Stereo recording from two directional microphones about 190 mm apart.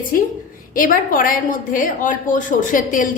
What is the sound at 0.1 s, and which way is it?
A woman's voice, 50° left (ahead or behind).